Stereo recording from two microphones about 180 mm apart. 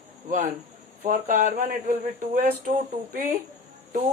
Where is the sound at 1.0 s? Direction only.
45° right (ahead or behind).